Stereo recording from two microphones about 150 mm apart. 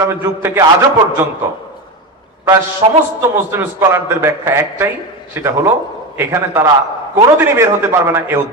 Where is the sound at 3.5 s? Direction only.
15° right (ahead or behind).